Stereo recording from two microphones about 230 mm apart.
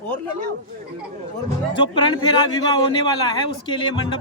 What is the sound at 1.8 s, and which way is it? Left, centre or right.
A woman's voice, left.